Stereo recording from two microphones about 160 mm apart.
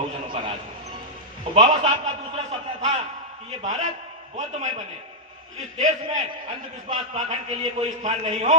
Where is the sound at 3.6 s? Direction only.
50° right (ahead or behind).